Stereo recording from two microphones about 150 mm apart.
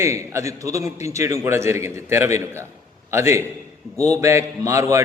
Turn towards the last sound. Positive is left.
turn(degrees=-20)  # may be behind; listen again after turning